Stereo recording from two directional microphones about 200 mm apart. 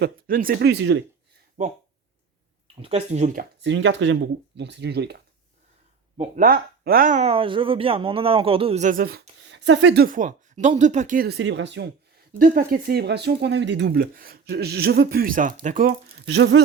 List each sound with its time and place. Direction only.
0.0 s speech: 45° right (ahead or behind); by 1.0 s 60° right (ahead or behind)
1.6 s speech: 40° right (ahead or behind)
2.8 s speech: 30° right (ahead or behind)
3.6 s speech: 65° right (ahead or behind)
6.1 s speech: 45° right (ahead or behind)
9.4 s speech: 65° right (ahead or behind)
12.3 s speech: 45° right (ahead or behind)
16.2 s speech: 65° right (ahead or behind)